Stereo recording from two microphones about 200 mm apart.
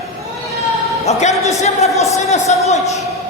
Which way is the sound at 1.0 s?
35° left (ahead or behind).